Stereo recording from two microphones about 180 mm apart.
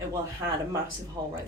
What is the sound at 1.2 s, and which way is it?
Speech, 20° right (ahead or behind).